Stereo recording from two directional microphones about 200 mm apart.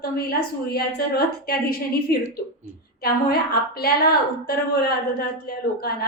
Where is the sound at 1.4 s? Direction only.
50° left (ahead or behind).